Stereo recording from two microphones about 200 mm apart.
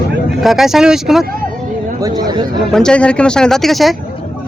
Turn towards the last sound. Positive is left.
turn(degrees=0)  # may be behind; listen again after turning